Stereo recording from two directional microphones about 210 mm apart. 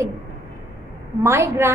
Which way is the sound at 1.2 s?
10° right (ahead or behind).